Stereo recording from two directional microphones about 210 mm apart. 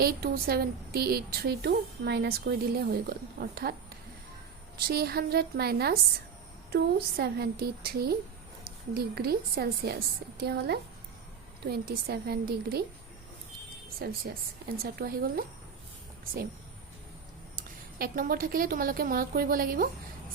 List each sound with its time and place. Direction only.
0.0 s a woman's voice: 45° right (ahead or behind)
4.9 s a woman's voice: 50° right (ahead or behind)
14.0 s a woman's voice: 45° right (ahead or behind)
17.6 s a woman's voice: 45° right (ahead or behind)